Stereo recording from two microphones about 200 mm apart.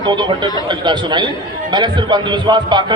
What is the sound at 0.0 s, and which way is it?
A man's voice, 25° right (ahead or behind).